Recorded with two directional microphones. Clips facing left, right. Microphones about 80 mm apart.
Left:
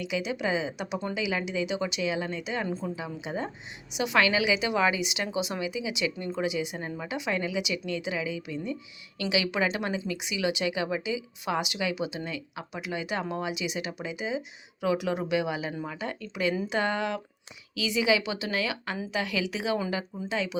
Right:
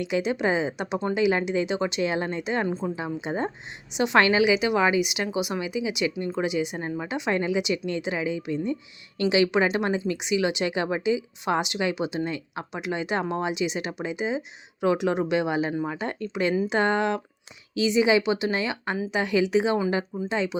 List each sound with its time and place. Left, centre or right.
0.0 s a woman's voice: right
2.6 s a woman's voice: right
2.9 s a woman's voice: right
15.7 s a woman's voice: right